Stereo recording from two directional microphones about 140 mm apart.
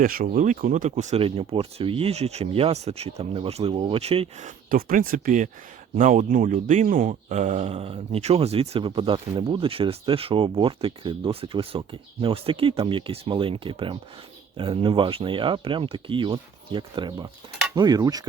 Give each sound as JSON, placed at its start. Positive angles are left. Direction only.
{"t": 0.0, "sound": "speech", "side_deg": -90}
{"t": 4.4, "sound": "a man's voice", "side_deg": -80}